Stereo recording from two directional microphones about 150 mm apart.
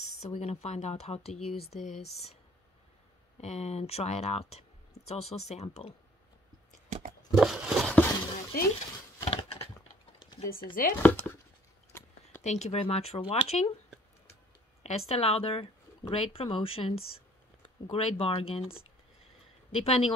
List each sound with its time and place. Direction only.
0.2 s speech: 45° left (ahead or behind)
3.3 s speech: 45° left (ahead or behind)
6.9 s a sound: 50° right (ahead or behind)
7.3 s a sound: 5° right (ahead or behind)
8.5 s speech: 75° left (ahead or behind)
9.2 s a sound: 40° left (ahead or behind)
10.7 s speech: 65° left (ahead or behind)
11.0 s speech: 15° left (ahead or behind)
12.4 s speech: 45° left (ahead or behind)
14.8 s speech: 45° left (ahead or behind)
19.7 s speech: 40° left (ahead or behind)